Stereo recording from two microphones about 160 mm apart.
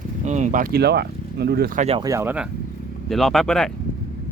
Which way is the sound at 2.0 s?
20° right (ahead or behind).